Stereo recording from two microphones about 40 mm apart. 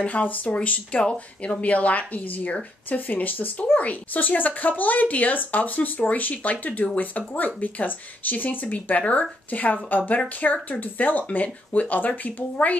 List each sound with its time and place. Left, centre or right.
0.0 s speech: left
1.6 s speech: left
8.8 s speech: left
11.4 s speech: left